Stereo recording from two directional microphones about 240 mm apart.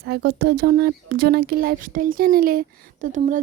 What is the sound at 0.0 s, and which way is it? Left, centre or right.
Speech, right.